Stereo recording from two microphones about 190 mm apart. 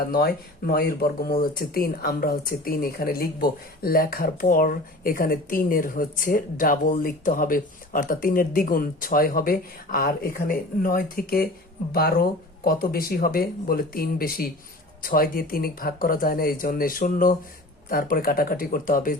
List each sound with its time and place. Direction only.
0.1 s speech: 55° left (ahead or behind)